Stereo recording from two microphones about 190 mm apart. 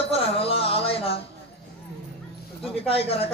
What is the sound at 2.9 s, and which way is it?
Speech, 30° left (ahead or behind).